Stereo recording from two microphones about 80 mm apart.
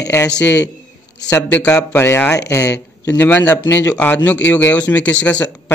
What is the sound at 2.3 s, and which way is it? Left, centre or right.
Speech, left.